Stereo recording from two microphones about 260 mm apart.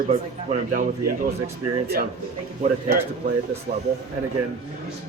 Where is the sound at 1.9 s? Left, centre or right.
Right.